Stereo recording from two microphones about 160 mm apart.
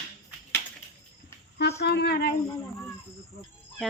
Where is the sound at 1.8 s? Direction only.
90° left.